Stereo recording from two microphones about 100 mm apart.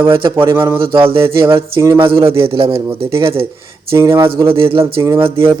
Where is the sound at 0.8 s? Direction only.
65° right (ahead or behind).